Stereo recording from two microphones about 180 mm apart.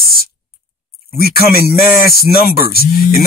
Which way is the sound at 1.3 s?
60° left (ahead or behind).